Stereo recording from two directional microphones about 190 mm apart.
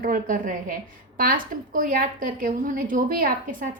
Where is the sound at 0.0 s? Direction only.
45° right (ahead or behind).